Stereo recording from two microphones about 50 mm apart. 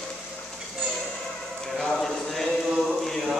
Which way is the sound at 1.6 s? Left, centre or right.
Centre.